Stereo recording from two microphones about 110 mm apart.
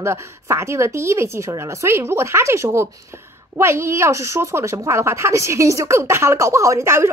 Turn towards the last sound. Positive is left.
turn(degrees=-25)  # may be behind; listen again after turning